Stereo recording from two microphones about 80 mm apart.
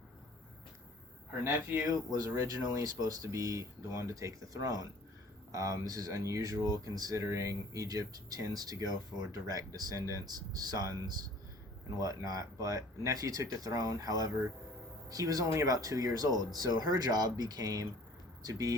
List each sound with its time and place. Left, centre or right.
2.0 s speech: right
11.9 s speech: right